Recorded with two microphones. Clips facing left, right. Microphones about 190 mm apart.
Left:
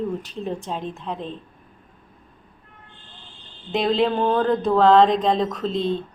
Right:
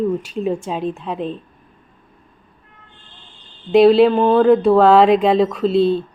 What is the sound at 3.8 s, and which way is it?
Speech, 80° right.